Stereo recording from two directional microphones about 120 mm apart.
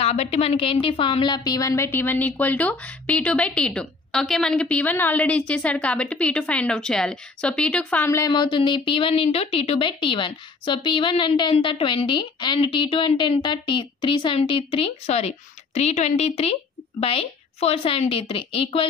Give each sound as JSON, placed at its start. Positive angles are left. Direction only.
{"t": 0.0, "sound": "a woman's voice", "side_deg": 60}
{"t": 8.3, "sound": "speech", "side_deg": 40}